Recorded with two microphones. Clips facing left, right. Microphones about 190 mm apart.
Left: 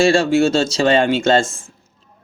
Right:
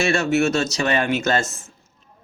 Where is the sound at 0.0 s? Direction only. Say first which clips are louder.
Left 5 dB; 30° left (ahead or behind).